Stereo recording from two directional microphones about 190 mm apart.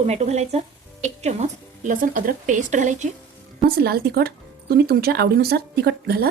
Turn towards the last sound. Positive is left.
turn(degrees=-55)  # may be behind; listen again after turning